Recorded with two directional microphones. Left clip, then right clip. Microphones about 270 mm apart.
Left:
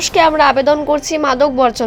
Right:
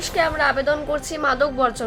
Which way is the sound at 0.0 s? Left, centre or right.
Left.